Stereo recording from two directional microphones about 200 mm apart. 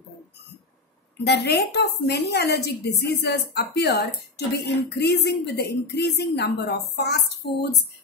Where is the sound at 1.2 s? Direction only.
55° left (ahead or behind).